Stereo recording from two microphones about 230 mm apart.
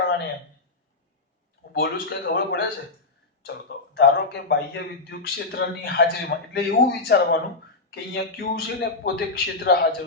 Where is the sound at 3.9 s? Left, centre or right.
Left.